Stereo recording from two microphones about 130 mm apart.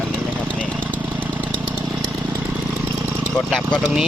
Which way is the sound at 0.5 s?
5° left (ahead or behind).